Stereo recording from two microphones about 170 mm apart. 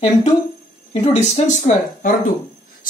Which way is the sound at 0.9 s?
40° left (ahead or behind).